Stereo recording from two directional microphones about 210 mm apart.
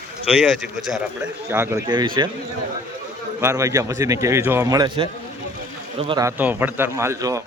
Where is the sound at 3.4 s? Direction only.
15° right (ahead or behind).